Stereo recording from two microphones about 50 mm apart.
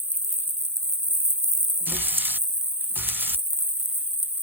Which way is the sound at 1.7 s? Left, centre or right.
Right.